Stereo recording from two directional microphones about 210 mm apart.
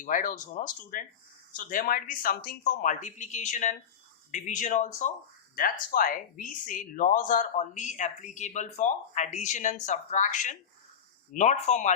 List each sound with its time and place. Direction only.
0.0 s speech: 40° left (ahead or behind)